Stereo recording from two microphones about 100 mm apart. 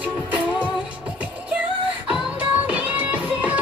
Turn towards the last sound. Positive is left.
turn(degrees=-15)  # may be behind; listen again after turning